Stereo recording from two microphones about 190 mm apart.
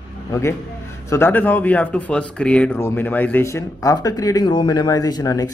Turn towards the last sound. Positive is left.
turn(degrees=20)  # may be behind; listen again after turning